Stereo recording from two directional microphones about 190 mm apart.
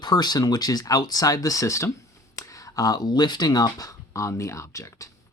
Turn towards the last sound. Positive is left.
turn(degrees=15)  # may be behind; listen again after turning